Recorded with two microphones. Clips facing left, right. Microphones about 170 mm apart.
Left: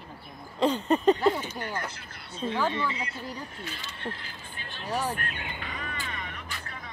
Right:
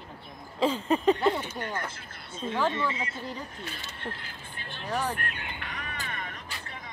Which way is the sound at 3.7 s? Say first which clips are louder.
Left 1 dB; 50° right (ahead or behind).